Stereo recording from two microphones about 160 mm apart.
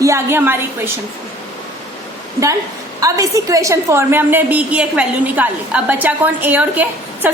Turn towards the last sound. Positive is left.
turn(degrees=-10)  # may be behind; listen again after turning